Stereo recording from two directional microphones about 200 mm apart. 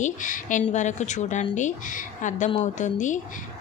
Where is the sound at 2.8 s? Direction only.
40° left (ahead or behind).